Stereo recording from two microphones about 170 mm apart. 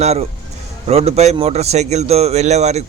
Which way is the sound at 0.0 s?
40° right (ahead or behind).